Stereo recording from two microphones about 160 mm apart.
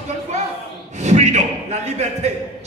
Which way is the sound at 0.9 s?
45° right (ahead or behind).